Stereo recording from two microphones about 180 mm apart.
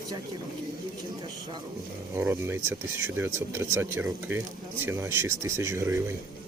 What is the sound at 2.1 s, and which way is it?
Speech, 15° right (ahead or behind).